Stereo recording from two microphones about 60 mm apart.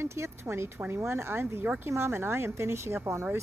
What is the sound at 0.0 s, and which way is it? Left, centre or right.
A woman's voice, right.